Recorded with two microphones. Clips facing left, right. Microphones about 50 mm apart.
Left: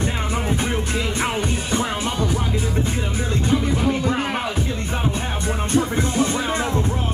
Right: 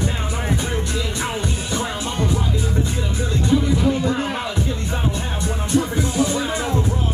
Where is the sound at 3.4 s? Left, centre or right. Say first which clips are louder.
Right 3 dB; left.